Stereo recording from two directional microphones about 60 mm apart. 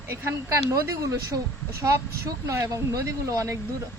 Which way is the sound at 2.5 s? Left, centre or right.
Right.